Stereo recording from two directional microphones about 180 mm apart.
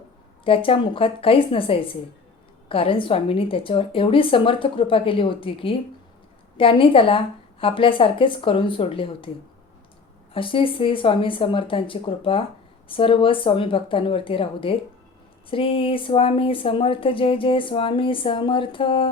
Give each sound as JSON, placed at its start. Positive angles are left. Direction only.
{"t": 0.4, "sound": "a woman's voice", "side_deg": 30}
{"t": 10.3, "sound": "speech", "side_deg": 30}